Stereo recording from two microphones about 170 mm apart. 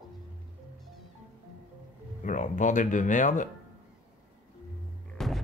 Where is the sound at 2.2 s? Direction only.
45° left (ahead or behind).